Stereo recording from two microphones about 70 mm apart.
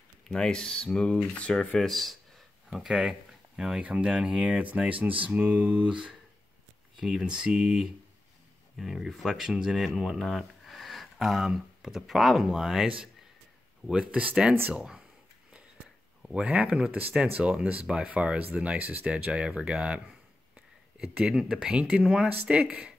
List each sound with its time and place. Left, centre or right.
0.3 s speech: centre
1.8 s speech: centre
13.8 s speech: centre
16.2 s a sound: centre
16.4 s speech: centre